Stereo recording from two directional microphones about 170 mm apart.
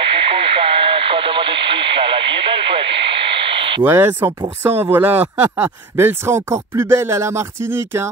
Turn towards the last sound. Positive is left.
turn(degrees=-15)  # may be behind; listen again after turning